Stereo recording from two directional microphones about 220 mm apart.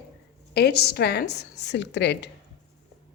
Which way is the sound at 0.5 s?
50° left (ahead or behind).